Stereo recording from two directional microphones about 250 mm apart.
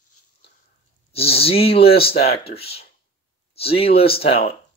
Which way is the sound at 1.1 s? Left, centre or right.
Left.